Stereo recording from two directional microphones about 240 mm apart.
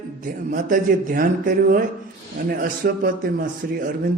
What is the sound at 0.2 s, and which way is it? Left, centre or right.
A man's voice, right.